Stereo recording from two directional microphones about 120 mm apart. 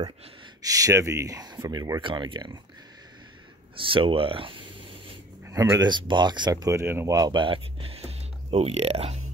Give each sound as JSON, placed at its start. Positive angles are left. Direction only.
{"t": 0.6, "sound": "speech", "side_deg": -30}
{"t": 3.7, "sound": "speech", "side_deg": -45}
{"t": 5.5, "sound": "speech", "side_deg": -25}
{"t": 5.9, "sound": "speech", "side_deg": -40}
{"t": 7.2, "sound": "speech", "side_deg": -40}